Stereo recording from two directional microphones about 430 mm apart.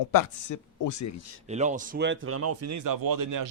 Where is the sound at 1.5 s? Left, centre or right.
Centre.